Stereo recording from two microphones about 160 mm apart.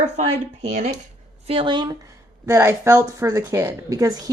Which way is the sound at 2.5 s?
15° right (ahead or behind).